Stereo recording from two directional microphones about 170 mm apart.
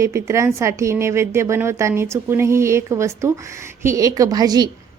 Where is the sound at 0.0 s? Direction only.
15° right (ahead or behind).